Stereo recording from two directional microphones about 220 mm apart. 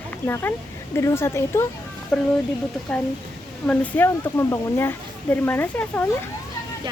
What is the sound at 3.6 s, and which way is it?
Speech, 5° left (ahead or behind).